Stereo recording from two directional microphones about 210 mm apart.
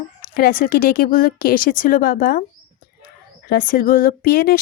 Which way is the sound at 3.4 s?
45° left (ahead or behind).